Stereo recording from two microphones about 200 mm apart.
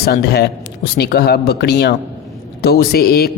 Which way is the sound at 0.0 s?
50° left (ahead or behind).